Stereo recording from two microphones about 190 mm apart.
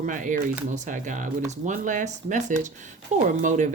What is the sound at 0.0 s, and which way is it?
Speech, 45° right (ahead or behind).